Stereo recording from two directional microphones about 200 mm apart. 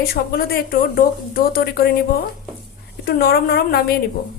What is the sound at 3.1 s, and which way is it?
Speech, 50° left (ahead or behind).